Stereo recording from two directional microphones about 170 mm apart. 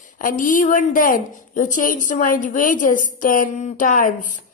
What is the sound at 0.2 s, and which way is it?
A woman's voice, 50° left (ahead or behind).